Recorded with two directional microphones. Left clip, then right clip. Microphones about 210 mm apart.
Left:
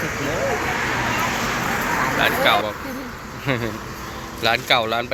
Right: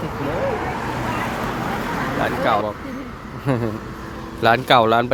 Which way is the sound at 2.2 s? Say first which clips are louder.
Left 1 dB; 20° right (ahead or behind).